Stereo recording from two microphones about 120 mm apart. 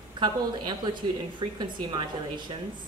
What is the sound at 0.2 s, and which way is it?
A woman's voice, 35° right (ahead or behind).